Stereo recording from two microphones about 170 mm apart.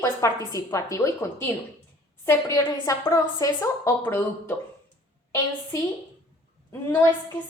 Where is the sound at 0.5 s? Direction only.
20° left (ahead or behind).